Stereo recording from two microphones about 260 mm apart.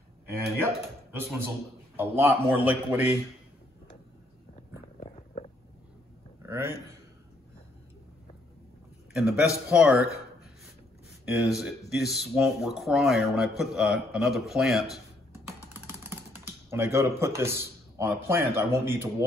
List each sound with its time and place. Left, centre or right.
1.1 s speech: centre
5.1 s stomach rumble: left
6.4 s a sound: centre
9.1 s speech: centre
15.7 s typing: centre
17.9 s speech: centre